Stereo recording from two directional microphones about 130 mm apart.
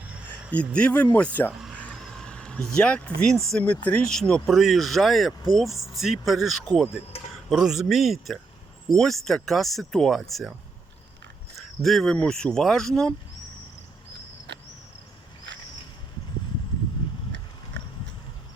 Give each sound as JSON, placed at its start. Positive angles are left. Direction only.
{"t": 0.0, "sound": "a sound", "side_deg": -10}
{"t": 0.5, "sound": "speech", "side_deg": 10}
{"t": 1.7, "sound": "vehicle", "side_deg": 10}
{"t": 3.2, "sound": "speech", "side_deg": 5}
{"t": 7.1, "sound": "a sound", "side_deg": 50}
{"t": 7.5, "sound": "speech", "side_deg": 0}
{"t": 11.5, "sound": "speech", "side_deg": 0}